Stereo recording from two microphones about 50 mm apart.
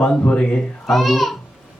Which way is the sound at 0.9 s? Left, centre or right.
Centre.